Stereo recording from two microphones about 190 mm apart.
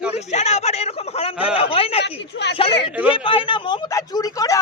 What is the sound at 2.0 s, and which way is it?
Speech, 60° left (ahead or behind).